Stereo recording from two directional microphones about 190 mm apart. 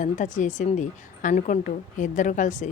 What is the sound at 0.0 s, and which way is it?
A woman's voice, 40° left (ahead or behind).